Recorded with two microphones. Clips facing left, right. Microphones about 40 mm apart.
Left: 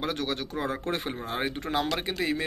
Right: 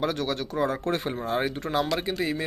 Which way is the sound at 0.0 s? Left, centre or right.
Left.